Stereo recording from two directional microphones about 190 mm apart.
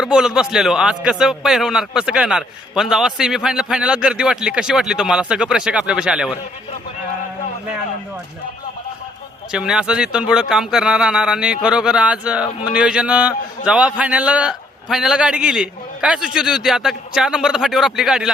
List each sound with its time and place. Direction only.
0.0 s speech: 5° right (ahead or behind)
9.5 s speech: 5° right (ahead or behind)